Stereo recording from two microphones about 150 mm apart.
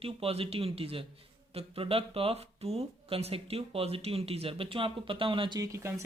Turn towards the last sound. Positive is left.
turn(degrees=-20)  # may be behind; listen again after turning